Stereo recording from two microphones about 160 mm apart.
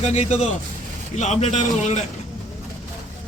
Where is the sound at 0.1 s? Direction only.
45° left (ahead or behind).